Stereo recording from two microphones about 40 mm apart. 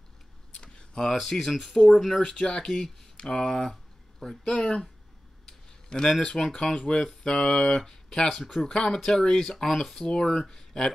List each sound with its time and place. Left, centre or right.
0.6 s a sound: centre
1.1 s speech: centre
2.1 s speech: centre
2.6 s speech: centre
3.2 s speech: centre
4.6 s speech: left
5.4 s a sound: centre
6.3 s speech: centre
7.0 s a sound: centre
7.3 s speech: centre